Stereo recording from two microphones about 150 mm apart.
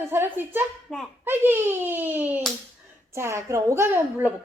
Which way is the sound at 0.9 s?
5° left (ahead or behind).